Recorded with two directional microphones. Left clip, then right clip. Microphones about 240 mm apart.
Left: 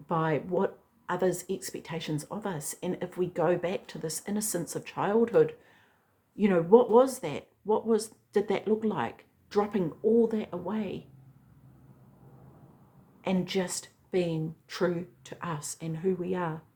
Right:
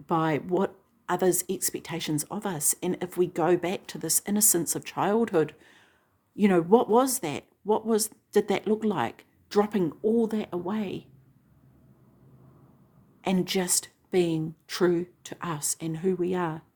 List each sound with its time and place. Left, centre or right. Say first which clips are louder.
0.1 s speech: right 3 dB; right
13.2 s speech: right 3 dB; right